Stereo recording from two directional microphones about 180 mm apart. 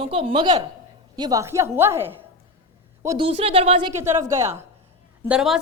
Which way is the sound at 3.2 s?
30° right (ahead or behind).